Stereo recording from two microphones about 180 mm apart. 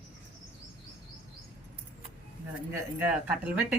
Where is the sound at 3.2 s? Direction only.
10° right (ahead or behind).